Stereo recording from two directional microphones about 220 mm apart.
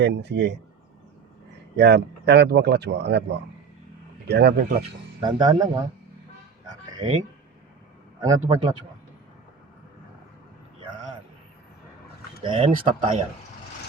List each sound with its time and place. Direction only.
0.0 s speech: 50° right (ahead or behind)
1.7 s speech: 50° right (ahead or behind)
5.2 s a man's voice: 20° right (ahead or behind)
8.2 s a man's voice: 15° right (ahead or behind)
12.4 s speech: 25° right (ahead or behind)